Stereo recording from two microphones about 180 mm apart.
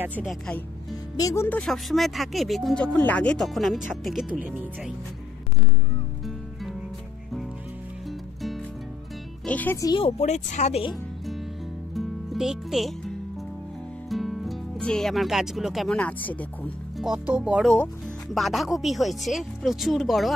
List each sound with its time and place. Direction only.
0.0 s speech: 10° right (ahead or behind)
1.1 s speech: 15° left (ahead or behind); by 4.9 s 5° right (ahead or behind)
9.5 s speech: 10° left (ahead or behind)
9.9 s speech: 35° left (ahead or behind)
11.9 s music: centre (ahead or behind)
14.0 s speech: centre (ahead or behind)